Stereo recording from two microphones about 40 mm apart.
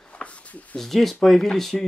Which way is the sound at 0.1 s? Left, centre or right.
Left.